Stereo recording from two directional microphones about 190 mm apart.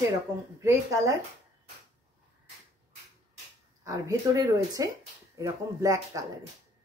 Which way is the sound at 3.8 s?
15° right (ahead or behind).